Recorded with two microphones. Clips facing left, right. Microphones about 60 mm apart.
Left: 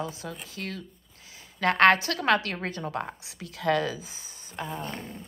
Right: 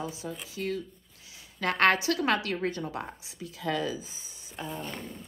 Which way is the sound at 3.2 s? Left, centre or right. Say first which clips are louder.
Left 3 dB; left.